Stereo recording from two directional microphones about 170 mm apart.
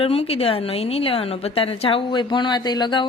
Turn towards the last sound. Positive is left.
turn(degrees=25)  # may be behind; listen again after turning